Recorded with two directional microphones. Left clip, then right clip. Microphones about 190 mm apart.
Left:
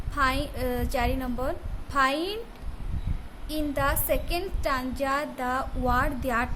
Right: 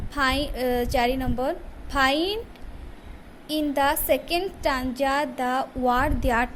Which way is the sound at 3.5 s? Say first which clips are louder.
Right 5 dB; 15° right (ahead or behind).